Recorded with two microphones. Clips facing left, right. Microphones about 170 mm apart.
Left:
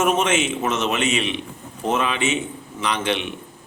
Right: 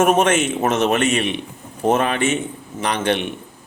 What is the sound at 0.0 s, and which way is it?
A man's voice, 55° right (ahead or behind).